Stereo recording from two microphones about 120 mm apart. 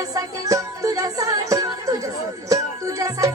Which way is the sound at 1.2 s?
25° right (ahead or behind).